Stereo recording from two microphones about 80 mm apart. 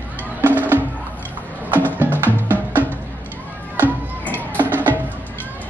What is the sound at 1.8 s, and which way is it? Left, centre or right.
Music, left.